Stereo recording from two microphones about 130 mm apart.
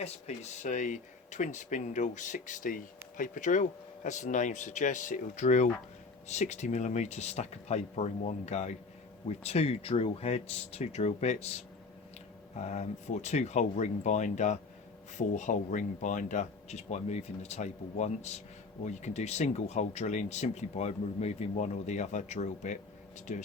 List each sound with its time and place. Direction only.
0.0 s speech: 60° left (ahead or behind)
12.5 s speech: 65° left (ahead or behind)